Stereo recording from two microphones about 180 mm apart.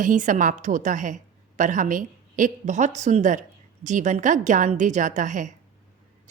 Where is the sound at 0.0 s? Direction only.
45° right (ahead or behind).